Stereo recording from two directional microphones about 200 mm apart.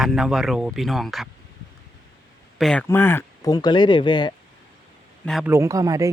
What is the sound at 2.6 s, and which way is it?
Speech, 5° left (ahead or behind).